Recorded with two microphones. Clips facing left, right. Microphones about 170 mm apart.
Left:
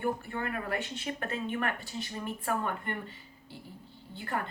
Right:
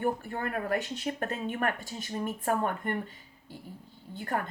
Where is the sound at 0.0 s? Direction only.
40° right (ahead or behind).